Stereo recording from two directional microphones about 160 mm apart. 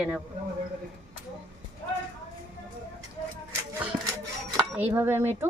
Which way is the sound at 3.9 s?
10° right (ahead or behind).